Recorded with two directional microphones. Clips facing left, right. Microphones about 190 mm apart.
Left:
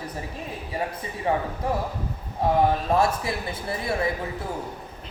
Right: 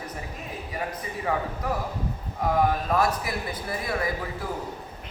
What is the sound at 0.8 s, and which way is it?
Speech, 30° left (ahead or behind).